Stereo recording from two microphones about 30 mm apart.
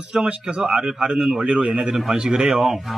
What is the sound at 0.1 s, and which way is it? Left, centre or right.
Speech, right.